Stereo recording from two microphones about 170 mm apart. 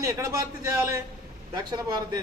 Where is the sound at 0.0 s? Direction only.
20° right (ahead or behind).